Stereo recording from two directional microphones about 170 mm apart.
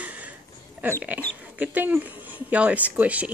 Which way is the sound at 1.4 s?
10° right (ahead or behind).